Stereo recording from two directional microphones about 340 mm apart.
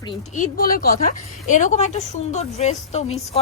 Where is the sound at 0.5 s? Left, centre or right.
Left.